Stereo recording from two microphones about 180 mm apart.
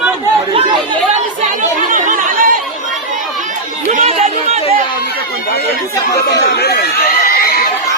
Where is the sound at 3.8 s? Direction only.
35° right (ahead or behind).